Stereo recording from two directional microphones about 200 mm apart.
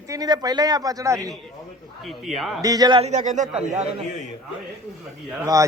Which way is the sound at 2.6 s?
20° right (ahead or behind).